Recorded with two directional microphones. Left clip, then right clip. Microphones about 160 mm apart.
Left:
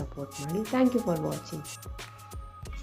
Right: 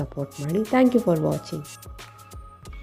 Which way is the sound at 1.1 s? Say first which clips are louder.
Right 8 dB; 20° right (ahead or behind).